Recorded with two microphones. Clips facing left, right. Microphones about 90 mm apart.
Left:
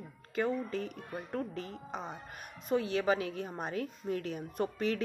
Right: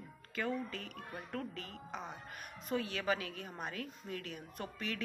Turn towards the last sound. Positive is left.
turn(degrees=35)  # may be behind; listen again after turning